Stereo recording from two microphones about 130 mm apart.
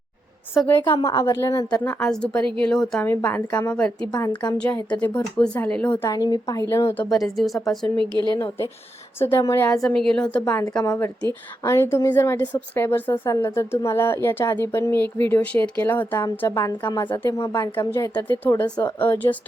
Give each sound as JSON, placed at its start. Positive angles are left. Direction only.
{"t": 0.9, "sound": "a woman's voice", "side_deg": 30}
{"t": 2.0, "sound": "a woman's voice", "side_deg": 5}
{"t": 3.0, "sound": "speech", "side_deg": 15}
{"t": 6.1, "sound": "a woman's voice", "side_deg": 30}
{"t": 7.1, "sound": "a woman's voice", "side_deg": 0}
{"t": 7.9, "sound": "a woman's voice", "side_deg": -35}
{"t": 9.1, "sound": "a woman's voice", "side_deg": 20}
{"t": 9.8, "sound": "a woman's voice", "side_deg": 0}
{"t": 17.1, "sound": "speech", "side_deg": 30}
{"t": 17.6, "sound": "speech", "side_deg": 20}